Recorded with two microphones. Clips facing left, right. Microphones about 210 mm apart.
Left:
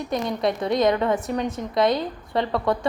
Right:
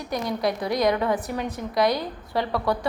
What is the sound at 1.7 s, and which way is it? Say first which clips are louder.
Speech: left 2 dB; 25° left (ahead or behind).